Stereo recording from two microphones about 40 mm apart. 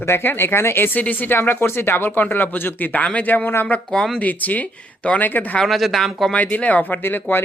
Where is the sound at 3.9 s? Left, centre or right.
Centre.